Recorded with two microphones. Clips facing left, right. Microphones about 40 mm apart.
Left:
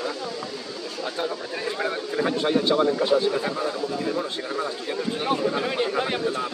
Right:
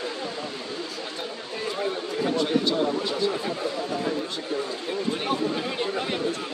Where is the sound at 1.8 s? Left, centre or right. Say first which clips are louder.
Left 2 dB; left.